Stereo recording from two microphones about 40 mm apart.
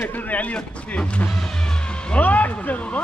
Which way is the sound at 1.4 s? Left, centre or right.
Left.